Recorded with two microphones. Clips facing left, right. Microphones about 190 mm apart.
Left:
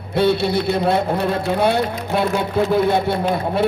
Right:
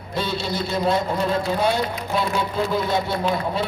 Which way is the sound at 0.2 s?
60° left (ahead or behind).